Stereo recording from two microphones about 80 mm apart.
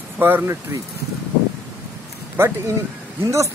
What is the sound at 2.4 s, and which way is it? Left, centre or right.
Speech, right.